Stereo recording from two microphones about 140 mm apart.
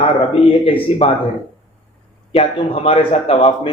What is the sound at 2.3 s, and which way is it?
Speech, 45° left (ahead or behind).